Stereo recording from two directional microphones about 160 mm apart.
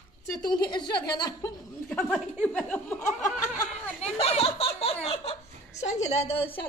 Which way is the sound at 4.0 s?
40° left (ahead or behind).